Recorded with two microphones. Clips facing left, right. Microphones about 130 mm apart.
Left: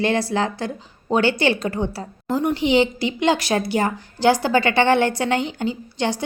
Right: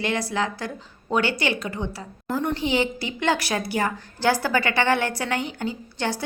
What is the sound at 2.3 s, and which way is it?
A woman's voice, 15° left (ahead or behind).